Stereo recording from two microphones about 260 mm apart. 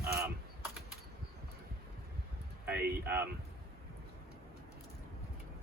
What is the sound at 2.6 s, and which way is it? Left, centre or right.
Speech, centre.